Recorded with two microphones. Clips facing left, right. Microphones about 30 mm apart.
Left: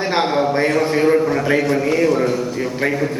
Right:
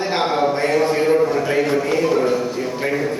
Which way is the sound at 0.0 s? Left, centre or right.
Centre.